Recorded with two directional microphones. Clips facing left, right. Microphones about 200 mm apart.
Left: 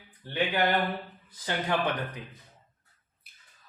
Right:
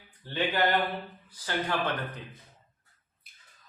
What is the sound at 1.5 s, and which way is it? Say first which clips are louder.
Speech: left 1 dB; 15° left (ahead or behind).